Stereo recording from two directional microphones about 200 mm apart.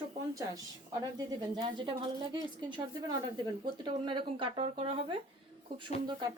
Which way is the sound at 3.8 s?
25° right (ahead or behind).